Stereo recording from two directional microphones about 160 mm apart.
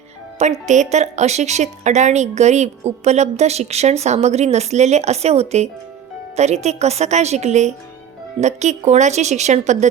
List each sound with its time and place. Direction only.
0.7 s a woman's voice: 45° right (ahead or behind)